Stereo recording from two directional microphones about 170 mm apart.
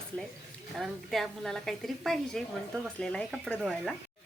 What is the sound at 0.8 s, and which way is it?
Speech, centre (ahead or behind).